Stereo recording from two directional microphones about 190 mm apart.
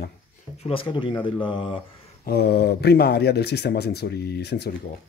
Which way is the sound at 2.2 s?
55° left (ahead or behind).